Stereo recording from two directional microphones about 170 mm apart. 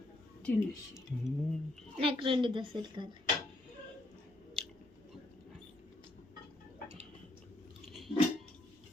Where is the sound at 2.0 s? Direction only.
30° right (ahead or behind).